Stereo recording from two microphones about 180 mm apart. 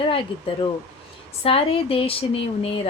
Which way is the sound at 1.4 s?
30° left (ahead or behind).